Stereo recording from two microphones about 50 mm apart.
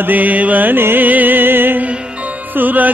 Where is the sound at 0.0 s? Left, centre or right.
Right.